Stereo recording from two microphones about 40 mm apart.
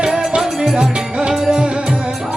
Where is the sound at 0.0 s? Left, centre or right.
Centre.